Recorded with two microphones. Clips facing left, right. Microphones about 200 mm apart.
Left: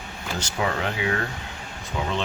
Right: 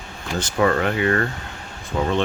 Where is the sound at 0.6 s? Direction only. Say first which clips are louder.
Right 8 dB; 55° right (ahead or behind).